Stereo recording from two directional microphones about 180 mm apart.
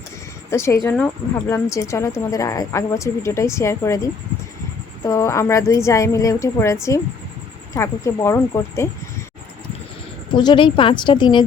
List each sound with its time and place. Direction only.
0.5 s speech: 15° left (ahead or behind)
10.3 s a woman's voice: 25° left (ahead or behind)